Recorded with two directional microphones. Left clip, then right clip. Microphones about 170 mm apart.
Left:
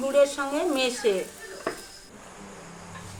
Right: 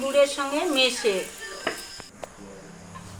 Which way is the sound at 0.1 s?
15° left (ahead or behind).